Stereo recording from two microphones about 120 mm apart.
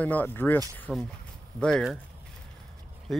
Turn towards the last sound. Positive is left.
turn(degrees=5)  # may be behind; listen again after turning